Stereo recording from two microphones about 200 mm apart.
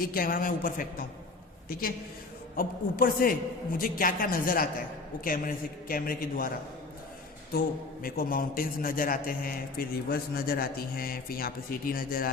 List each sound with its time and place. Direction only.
0.0 s a man's voice: 45° left (ahead or behind)
2.6 s a man's voice: 45° left (ahead or behind)
8.0 s a man's voice: 45° left (ahead or behind)